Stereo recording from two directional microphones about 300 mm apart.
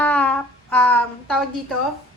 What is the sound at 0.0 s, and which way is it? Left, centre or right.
Humming, centre.